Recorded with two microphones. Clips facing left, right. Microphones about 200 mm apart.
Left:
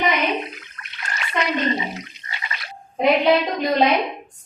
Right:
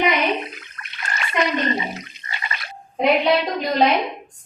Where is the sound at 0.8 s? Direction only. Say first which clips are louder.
Right 3 dB; 50° right (ahead or behind).